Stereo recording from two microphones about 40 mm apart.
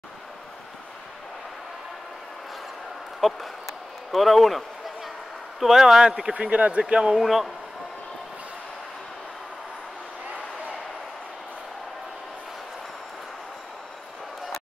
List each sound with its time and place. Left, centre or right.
3.2 s speech: centre
4.1 s a sound: centre
5.6 s speech: centre
6.3 s speech: right
7.2 s a man's voice: centre